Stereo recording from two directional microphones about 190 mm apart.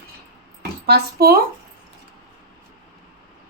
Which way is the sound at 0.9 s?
55° right (ahead or behind).